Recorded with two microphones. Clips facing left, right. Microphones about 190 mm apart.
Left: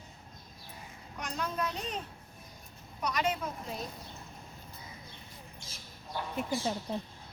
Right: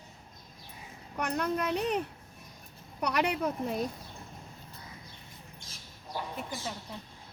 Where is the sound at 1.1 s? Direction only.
60° right (ahead or behind).